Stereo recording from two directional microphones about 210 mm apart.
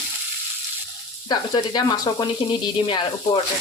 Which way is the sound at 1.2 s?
20° left (ahead or behind).